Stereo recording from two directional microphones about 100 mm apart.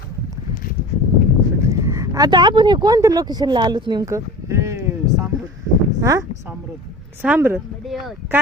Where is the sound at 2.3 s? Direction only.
50° right (ahead or behind).